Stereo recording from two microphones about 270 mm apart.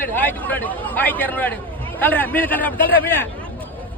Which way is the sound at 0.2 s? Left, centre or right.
Centre.